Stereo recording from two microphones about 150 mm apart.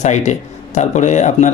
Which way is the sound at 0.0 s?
50° left (ahead or behind).